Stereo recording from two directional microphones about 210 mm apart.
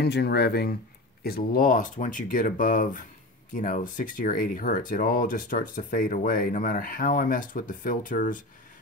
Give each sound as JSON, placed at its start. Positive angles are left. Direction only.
{"t": 0.0, "sound": "speech", "side_deg": 50}